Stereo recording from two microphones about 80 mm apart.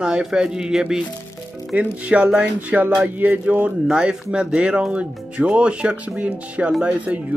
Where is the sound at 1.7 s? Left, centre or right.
Centre.